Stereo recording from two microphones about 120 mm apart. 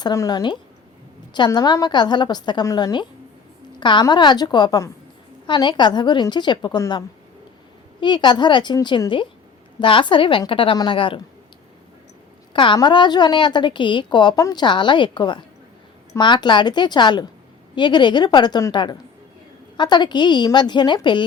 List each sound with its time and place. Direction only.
0.0 s a woman's voice: 30° left (ahead or behind)
8.0 s a woman's voice: 40° left (ahead or behind)
12.5 s a woman's voice: 40° left (ahead or behind)